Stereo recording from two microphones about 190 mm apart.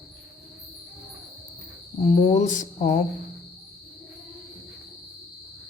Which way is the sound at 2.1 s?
40° left (ahead or behind).